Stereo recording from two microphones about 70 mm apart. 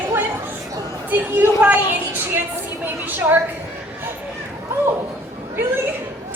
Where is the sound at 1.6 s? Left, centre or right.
Right.